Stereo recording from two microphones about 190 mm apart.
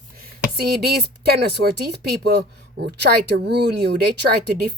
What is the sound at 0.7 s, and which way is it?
A woman's voice, 55° right (ahead or behind).